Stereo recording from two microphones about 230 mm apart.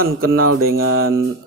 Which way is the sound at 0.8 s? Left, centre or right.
Right.